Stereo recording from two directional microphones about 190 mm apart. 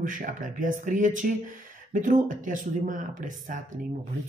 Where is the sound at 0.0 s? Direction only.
45° right (ahead or behind).